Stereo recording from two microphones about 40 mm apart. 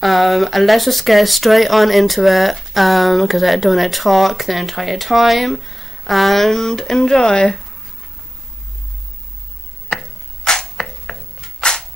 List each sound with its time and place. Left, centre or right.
0.0 s speech: centre
10.4 s arrow: centre